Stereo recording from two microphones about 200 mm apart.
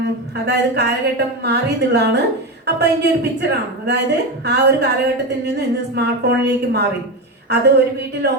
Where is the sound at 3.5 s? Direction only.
55° right (ahead or behind).